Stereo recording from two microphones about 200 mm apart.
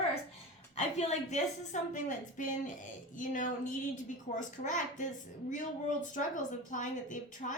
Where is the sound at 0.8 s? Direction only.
35° left (ahead or behind).